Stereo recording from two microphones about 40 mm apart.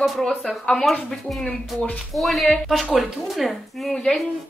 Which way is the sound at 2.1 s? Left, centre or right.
Centre.